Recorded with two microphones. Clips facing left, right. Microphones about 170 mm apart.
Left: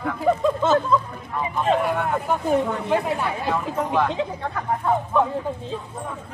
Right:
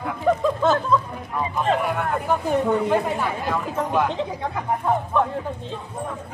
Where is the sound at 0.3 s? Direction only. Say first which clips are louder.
Even; centre (ahead or behind).